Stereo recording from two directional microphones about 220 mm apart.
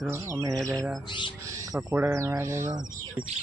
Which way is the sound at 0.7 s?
Centre (ahead or behind).